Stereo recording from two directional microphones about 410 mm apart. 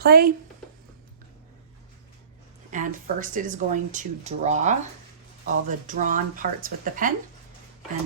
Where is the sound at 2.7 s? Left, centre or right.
Centre.